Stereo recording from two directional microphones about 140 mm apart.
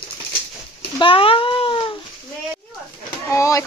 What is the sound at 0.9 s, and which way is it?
Cat, 40° left (ahead or behind).